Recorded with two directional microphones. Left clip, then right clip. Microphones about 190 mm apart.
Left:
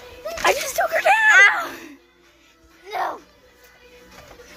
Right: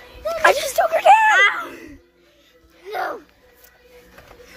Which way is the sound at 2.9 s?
20° right (ahead or behind).